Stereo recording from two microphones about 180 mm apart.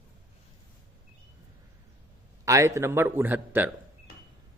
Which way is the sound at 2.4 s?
15° right (ahead or behind).